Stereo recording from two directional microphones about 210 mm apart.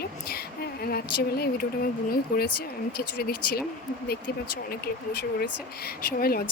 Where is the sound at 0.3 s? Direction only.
45° left (ahead or behind).